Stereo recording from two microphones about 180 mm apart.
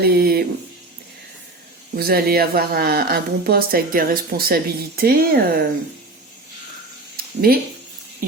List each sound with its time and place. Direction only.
0.0 s speech: 60° right (ahead or behind)
2.0 s speech: 60° right (ahead or behind)
7.2 s a sound: 55° right (ahead or behind)